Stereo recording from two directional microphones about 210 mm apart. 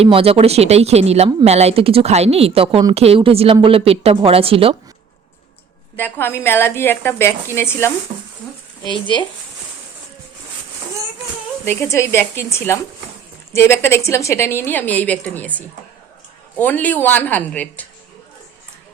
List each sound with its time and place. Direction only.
0.0 s speech: 30° right (ahead or behind)
6.0 s a woman's voice: 10° left (ahead or behind)
8.8 s speech: 20° left (ahead or behind)
11.6 s a woman's voice: 10° left (ahead or behind)